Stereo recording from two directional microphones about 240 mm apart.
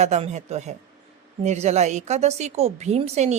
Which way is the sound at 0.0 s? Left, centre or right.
Right.